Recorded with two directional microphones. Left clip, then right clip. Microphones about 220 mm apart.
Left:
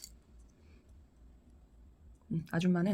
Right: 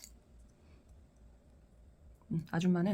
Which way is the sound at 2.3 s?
5° left (ahead or behind).